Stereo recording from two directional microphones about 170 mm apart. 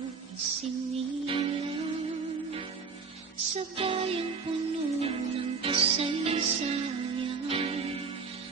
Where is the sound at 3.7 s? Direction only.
35° right (ahead or behind).